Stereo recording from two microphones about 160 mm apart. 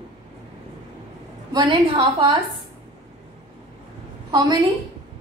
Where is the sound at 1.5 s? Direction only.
30° right (ahead or behind).